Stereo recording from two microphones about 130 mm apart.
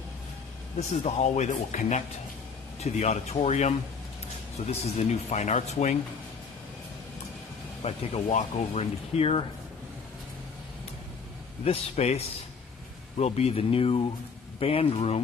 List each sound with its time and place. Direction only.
0.7 s speech: 60° left (ahead or behind)
7.8 s speech: 50° left (ahead or behind)
8.3 s speech: 65° left (ahead or behind)
11.6 s speech: 50° left (ahead or behind)